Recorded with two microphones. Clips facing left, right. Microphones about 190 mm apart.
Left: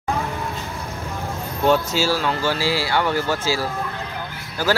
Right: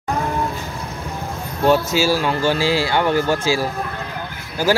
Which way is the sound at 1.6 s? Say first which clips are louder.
Right 3 dB; 10° right (ahead or behind).